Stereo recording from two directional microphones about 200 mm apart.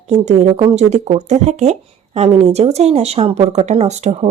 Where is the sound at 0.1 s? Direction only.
30° right (ahead or behind).